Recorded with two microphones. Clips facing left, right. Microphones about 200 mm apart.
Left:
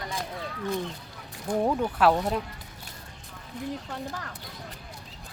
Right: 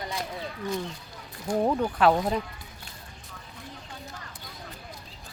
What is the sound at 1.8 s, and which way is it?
Speech, 5° left (ahead or behind).